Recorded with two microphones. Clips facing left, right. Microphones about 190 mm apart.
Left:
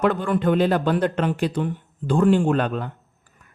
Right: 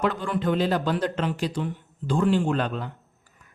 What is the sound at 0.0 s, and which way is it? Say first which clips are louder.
A man's voice: left 5 dB; 55° left (ahead or behind).